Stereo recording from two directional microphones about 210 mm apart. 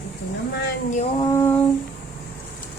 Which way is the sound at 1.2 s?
15° left (ahead or behind).